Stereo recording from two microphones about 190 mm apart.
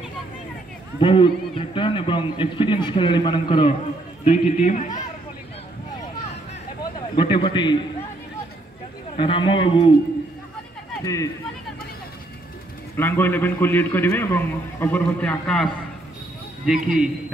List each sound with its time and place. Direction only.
0.9 s a man's voice: 25° left (ahead or behind)
4.2 s a man's voice: 40° left (ahead or behind)
7.2 s a man's voice: 25° left (ahead or behind)
9.1 s a man's voice: 25° left (ahead or behind)
12.9 s a man's voice: 10° left (ahead or behind)